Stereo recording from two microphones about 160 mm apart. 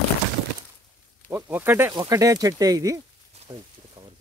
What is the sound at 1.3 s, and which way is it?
Speech, 15° right (ahead or behind).